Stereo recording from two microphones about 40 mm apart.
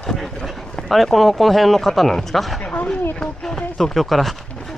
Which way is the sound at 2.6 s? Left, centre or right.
Left.